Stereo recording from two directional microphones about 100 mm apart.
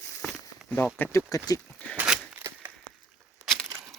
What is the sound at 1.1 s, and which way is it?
Speech, 35° left (ahead or behind).